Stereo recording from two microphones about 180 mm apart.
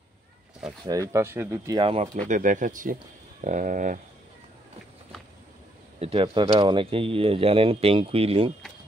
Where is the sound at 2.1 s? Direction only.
45° right (ahead or behind).